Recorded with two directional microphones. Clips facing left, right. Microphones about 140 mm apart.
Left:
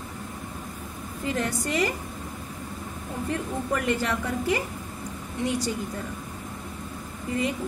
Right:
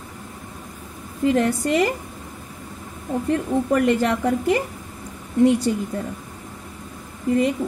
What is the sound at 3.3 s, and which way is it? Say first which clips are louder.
A woman's voice: right 9 dB; 50° right (ahead or behind).